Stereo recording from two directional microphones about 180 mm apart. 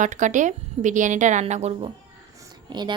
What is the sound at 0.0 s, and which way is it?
A woman's voice, 45° right (ahead or behind).